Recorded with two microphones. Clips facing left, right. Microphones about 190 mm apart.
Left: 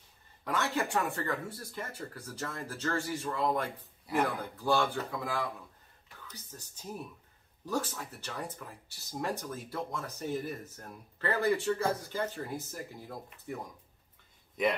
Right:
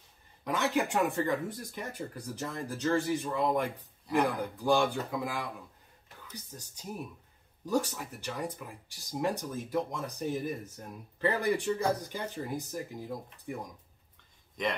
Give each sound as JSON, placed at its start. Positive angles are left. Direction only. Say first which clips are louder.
{"t": 0.4, "sound": "speech", "louder": "right 3 dB", "side_deg": -15}